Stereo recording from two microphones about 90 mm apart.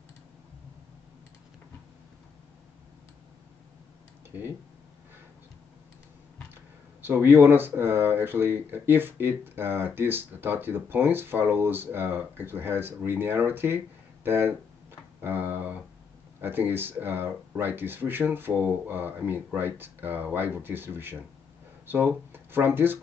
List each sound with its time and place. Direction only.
6.5 s speech: 25° right (ahead or behind)
15.1 s a sound: 25° right (ahead or behind)
16.3 s speech: 25° right (ahead or behind)